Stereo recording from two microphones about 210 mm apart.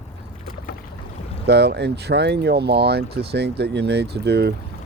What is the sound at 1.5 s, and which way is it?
Speech, 55° right (ahead or behind).